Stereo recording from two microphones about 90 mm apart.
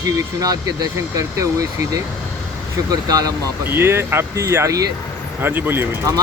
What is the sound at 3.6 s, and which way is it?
Speech, 25° right (ahead or behind).